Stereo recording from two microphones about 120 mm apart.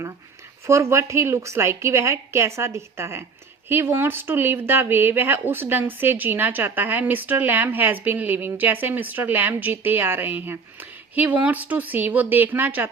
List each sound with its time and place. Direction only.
0.7 s a woman's voice: 25° right (ahead or behind)